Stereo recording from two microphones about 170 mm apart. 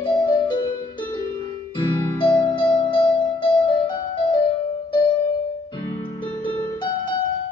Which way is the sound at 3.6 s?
25° left (ahead or behind).